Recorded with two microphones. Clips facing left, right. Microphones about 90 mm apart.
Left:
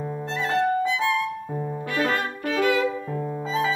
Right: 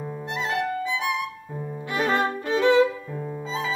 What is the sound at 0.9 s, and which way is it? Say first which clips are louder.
Music: left 3 dB; 15° right (ahead or behind).